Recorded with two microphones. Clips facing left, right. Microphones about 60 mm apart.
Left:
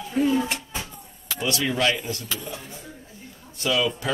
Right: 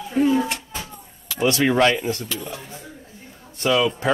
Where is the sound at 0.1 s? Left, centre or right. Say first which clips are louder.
Right 3 dB; centre.